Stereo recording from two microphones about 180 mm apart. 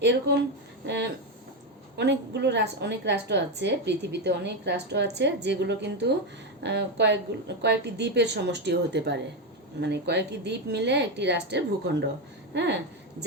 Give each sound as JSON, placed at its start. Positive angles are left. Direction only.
{"t": 0.0, "sound": "a woman's voice", "side_deg": -70}